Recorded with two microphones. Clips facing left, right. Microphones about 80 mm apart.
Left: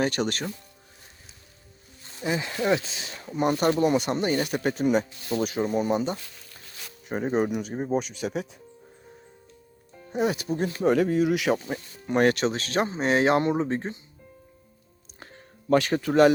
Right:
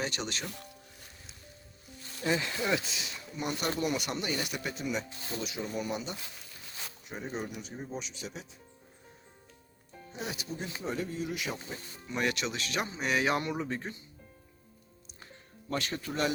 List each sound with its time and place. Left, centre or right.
0.0 s speech: left
2.2 s speech: centre
3.1 s speech: left
10.1 s speech: left
15.7 s speech: left